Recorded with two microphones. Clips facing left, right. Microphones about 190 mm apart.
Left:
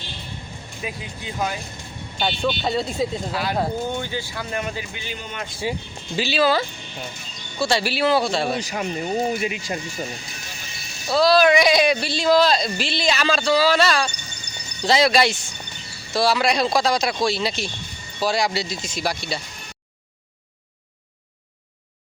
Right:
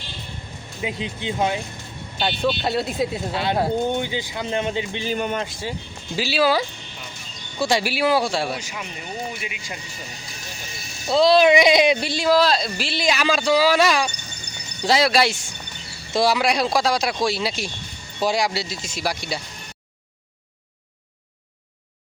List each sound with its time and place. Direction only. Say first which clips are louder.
0.8 s speech: right 5 dB; 20° right (ahead or behind)
2.1 s speech: right 1 dB; 5° right (ahead or behind)
3.3 s speech: right 4 dB; 25° right (ahead or behind)
5.1 s speech: right 12 dB; 50° right (ahead or behind)
5.7 s speech: left 4 dB; 10° left (ahead or behind)
6.1 s speech: even; 5° right (ahead or behind)
8.6 s speech: left 8 dB; 40° left (ahead or behind)
11.1 s speech: right 1 dB; 25° right (ahead or behind); by 15.4 s 5° right (ahead or behind)
16.1 s speech: even; 15° right (ahead or behind)